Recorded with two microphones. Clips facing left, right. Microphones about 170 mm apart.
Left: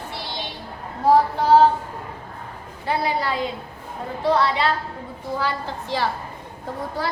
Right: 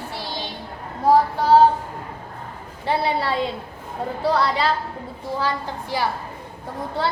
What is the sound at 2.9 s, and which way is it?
Speech, 30° right (ahead or behind).